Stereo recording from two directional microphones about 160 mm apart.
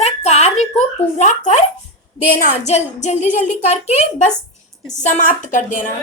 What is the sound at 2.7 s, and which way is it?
A woman's voice, 45° left (ahead or behind).